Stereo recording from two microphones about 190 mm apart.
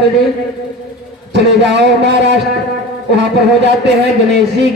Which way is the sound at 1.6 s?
65° right (ahead or behind).